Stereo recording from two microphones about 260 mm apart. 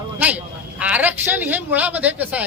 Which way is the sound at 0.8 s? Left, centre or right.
Centre.